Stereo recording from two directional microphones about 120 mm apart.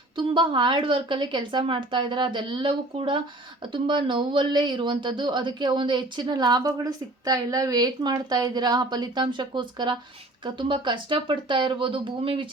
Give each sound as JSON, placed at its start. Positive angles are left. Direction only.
{"t": 0.2, "sound": "a woman's voice", "side_deg": -40}